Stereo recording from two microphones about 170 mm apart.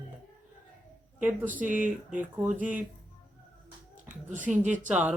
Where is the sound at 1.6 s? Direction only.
50° right (ahead or behind).